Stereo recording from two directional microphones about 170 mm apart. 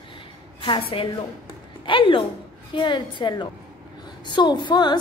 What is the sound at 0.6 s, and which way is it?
A woman's voice, 30° left (ahead or behind).